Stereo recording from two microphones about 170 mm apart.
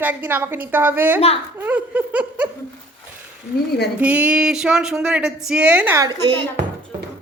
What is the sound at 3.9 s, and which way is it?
Speech, 10° right (ahead or behind).